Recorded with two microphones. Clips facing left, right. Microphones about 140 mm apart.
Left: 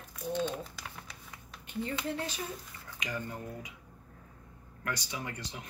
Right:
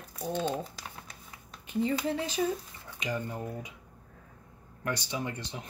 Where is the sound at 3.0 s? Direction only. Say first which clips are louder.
Right 4 dB; 25° right (ahead or behind).